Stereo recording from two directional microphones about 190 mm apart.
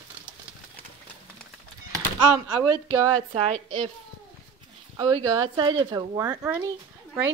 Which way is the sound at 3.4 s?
30° right (ahead or behind).